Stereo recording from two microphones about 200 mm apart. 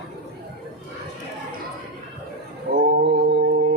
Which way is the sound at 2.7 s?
50° right (ahead or behind).